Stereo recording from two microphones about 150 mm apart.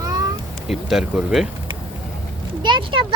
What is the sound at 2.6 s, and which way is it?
Speech, 30° right (ahead or behind).